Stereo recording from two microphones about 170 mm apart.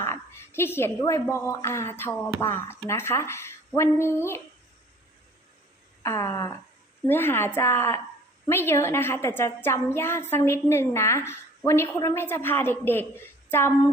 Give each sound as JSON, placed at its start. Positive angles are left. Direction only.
{"t": 0.0, "sound": "a woman's voice", "side_deg": 15}
{"t": 6.0, "sound": "a woman's voice", "side_deg": 15}